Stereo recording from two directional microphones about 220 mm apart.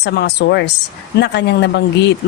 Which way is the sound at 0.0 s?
50° left (ahead or behind).